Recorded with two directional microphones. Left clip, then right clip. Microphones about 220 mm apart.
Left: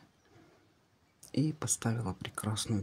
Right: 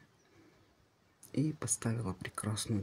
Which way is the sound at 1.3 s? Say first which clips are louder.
Left 2 dB; 15° left (ahead or behind).